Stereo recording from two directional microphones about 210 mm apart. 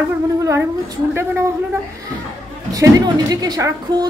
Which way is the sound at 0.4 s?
15° right (ahead or behind).